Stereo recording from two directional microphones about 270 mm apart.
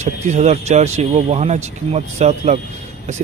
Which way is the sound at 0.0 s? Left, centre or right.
Right.